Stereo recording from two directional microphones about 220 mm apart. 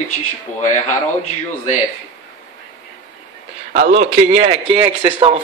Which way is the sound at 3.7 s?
30° right (ahead or behind).